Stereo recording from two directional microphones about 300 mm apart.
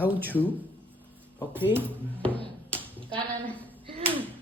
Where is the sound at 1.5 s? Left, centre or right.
Centre.